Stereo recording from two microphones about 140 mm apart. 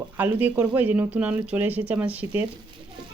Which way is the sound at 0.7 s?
10° right (ahead or behind).